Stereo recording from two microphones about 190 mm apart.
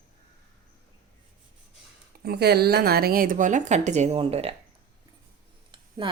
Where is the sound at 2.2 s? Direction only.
55° right (ahead or behind); by 4.5 s 30° right (ahead or behind).